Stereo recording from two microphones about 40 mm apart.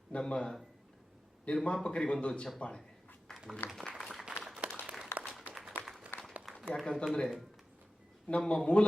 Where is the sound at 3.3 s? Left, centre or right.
Centre.